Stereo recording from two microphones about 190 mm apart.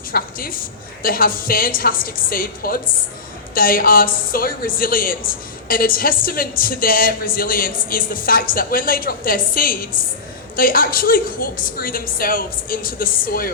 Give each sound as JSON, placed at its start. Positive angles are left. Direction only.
{"t": 0.1, "sound": "a woman's voice", "side_deg": 50}